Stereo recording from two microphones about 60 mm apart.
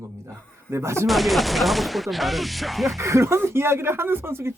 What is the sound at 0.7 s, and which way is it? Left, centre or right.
Speech, right.